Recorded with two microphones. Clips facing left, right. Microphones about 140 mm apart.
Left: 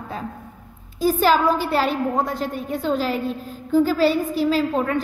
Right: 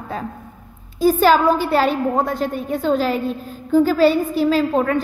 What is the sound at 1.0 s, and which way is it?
A woman's voice, 55° right (ahead or behind).